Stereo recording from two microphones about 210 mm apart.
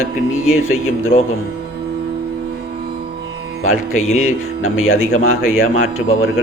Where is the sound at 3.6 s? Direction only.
85° left.